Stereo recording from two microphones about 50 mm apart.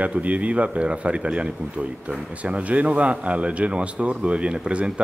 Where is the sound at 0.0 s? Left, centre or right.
Right.